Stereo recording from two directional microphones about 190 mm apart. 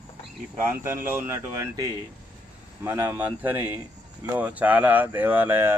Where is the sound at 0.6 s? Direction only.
10° right (ahead or behind).